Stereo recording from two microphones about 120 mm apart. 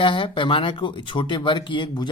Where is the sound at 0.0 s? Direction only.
45° left (ahead or behind).